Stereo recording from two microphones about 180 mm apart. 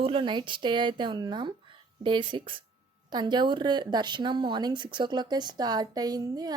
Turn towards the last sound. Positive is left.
turn(degrees=-20)  # may be behind; listen again after turning